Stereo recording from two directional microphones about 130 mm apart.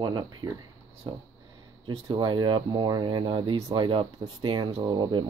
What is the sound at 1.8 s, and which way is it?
Speech, 40° right (ahead or behind).